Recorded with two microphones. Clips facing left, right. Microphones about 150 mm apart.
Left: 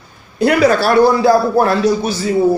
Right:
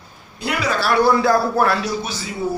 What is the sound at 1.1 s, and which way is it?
Speech, 30° left (ahead or behind).